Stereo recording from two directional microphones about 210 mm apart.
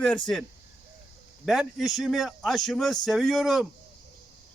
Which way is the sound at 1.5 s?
Centre (ahead or behind).